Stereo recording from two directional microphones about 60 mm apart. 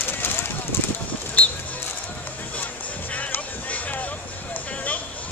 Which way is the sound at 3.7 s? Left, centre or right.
Left.